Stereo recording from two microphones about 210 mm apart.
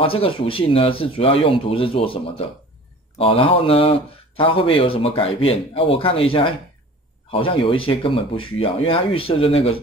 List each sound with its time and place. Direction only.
0.0 s speech: 25° left (ahead or behind)